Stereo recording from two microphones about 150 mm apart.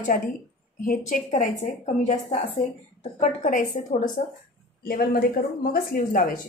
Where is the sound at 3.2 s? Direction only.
55° left (ahead or behind).